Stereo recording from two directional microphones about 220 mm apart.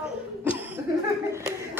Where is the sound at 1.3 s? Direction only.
15° right (ahead or behind).